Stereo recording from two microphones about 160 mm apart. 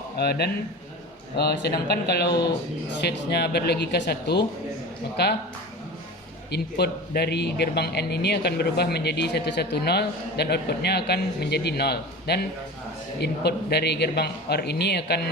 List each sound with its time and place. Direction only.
0.2 s a man's voice: 85° left
6.5 s a man's voice: 90° left